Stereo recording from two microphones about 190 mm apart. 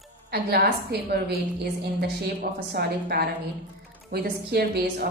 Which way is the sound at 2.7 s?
55° right (ahead or behind).